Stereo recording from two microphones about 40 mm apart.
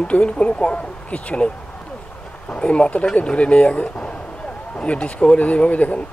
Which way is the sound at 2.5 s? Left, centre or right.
Left.